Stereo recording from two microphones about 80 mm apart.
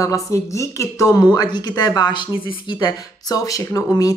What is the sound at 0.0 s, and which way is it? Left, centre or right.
Speech, left.